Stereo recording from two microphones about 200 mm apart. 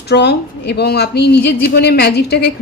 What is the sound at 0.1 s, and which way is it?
Speech, 55° left (ahead or behind).